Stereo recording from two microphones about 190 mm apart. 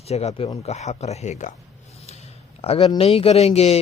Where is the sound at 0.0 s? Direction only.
35° left (ahead or behind).